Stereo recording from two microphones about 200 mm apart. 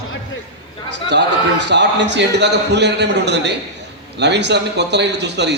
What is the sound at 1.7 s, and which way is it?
A man's voice, 60° right (ahead or behind).